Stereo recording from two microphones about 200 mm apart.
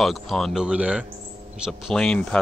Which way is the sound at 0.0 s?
Centre (ahead or behind).